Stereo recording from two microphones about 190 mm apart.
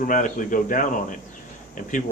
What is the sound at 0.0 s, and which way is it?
Speech, 45° left (ahead or behind).